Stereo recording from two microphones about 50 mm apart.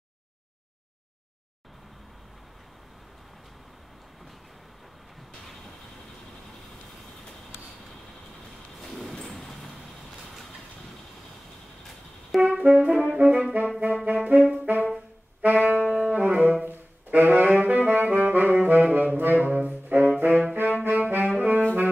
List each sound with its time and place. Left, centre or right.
9.2 s train: centre
12.3 s brass instrument: centre
12.6 s brass instrument: right
13.6 s music: right
14.0 s brass instrument: right
15.4 s music: right
17.1 s saxophone: right
19.1 s brass instrument: right
20.5 s saxophone: right
20.8 s brass instrument: right